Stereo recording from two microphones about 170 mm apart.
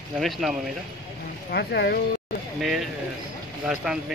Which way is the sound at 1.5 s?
80° left.